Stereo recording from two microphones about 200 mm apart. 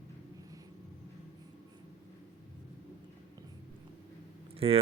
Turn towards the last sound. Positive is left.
turn(degrees=-30)  # may be behind; listen again after turning